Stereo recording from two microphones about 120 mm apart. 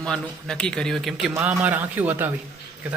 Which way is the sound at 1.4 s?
10° right (ahead or behind).